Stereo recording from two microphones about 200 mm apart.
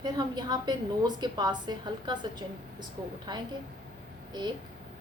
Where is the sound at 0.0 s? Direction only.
20° right (ahead or behind).